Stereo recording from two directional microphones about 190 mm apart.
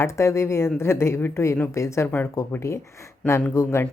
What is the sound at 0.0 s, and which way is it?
A woman's voice, 15° left (ahead or behind).